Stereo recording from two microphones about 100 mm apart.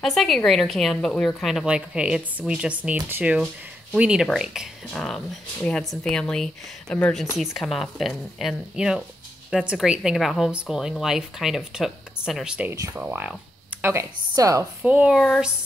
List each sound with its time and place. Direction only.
0.0 s a woman's voice: centre (ahead or behind); by 14.0 s 20° right (ahead or behind)
14.3 s a woman's voice: 35° right (ahead or behind)
14.8 s speech: 15° right (ahead or behind)
15.1 s speech: 5° left (ahead or behind)